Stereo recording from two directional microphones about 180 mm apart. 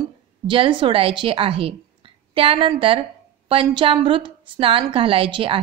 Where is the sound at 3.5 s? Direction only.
30° right (ahead or behind).